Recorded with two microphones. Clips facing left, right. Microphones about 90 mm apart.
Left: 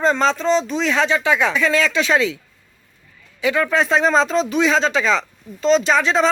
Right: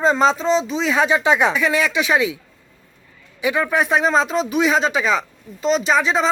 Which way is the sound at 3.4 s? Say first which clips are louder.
Left 1 dB; 15° right (ahead or behind).